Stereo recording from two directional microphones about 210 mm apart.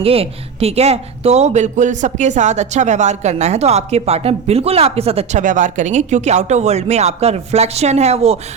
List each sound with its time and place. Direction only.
0.0 s speech: 25° right (ahead or behind)